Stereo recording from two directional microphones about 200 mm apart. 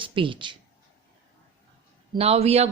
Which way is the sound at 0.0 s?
25° right (ahead or behind).